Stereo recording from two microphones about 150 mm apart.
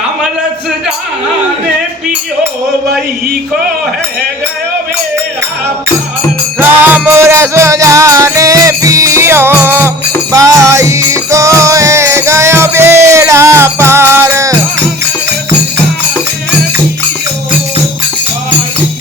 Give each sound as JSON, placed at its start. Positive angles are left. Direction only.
{"t": 6.6, "sound": "music", "side_deg": -15}